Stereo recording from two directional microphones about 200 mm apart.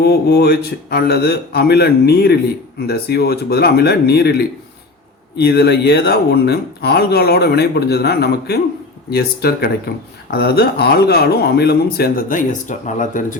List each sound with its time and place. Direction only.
0.0 s speech: 55° left (ahead or behind)